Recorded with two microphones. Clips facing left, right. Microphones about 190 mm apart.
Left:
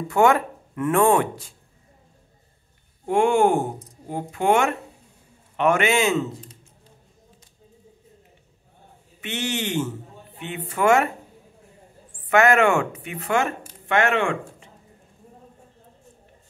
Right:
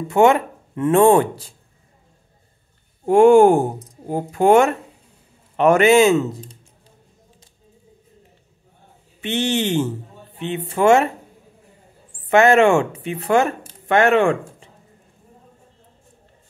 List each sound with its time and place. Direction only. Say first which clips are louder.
0.1 s speech: right 4 dB; 25° right (ahead or behind)
3.1 s speech: right 8 dB; 40° right (ahead or behind)
9.2 s speech: right 7 dB; 30° right (ahead or behind)
12.3 s speech: right 4 dB; 25° right (ahead or behind)